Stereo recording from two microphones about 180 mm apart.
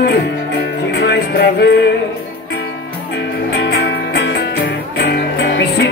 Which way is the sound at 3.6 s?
80° left.